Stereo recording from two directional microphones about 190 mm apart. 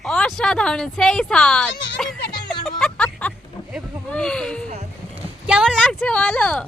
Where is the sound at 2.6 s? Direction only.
5° left (ahead or behind).